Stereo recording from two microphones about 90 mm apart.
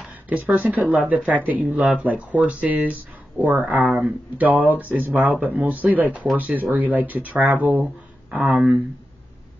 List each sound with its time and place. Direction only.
0.3 s speech: 15° right (ahead or behind)
1.8 s speech: 5° right (ahead or behind)
2.0 s speech: 15° right (ahead or behind)
7.8 s speech: 5° right (ahead or behind)